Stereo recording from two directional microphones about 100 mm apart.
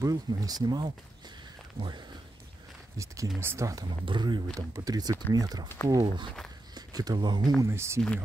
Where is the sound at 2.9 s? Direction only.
30° right (ahead or behind).